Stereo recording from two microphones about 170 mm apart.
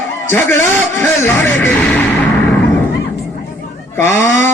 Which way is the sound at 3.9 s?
15° left (ahead or behind).